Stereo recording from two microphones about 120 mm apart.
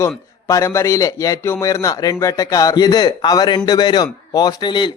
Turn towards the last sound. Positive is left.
turn(degrees=40)  # may be behind; listen again after turning